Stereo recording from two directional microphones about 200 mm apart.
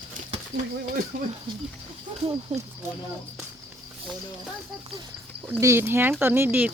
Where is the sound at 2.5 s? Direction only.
35° right (ahead or behind).